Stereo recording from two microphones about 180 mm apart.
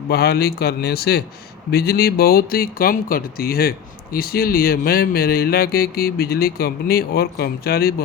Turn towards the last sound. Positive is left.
turn(degrees=60)  # may be behind; listen again after turning